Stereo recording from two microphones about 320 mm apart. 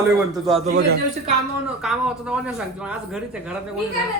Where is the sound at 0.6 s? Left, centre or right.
Right.